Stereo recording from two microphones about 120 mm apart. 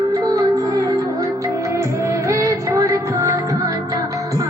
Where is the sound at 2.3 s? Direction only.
25° right (ahead or behind).